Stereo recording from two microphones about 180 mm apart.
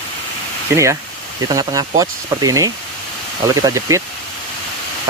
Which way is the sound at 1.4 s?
20° right (ahead or behind).